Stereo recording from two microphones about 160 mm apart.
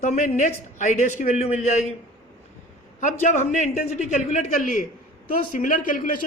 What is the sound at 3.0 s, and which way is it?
A man's voice, 50° left (ahead or behind).